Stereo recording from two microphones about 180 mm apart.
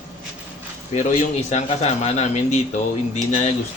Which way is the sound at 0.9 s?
40° left (ahead or behind).